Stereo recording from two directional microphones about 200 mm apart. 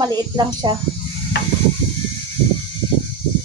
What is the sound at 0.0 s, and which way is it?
Speech, 20° right (ahead or behind).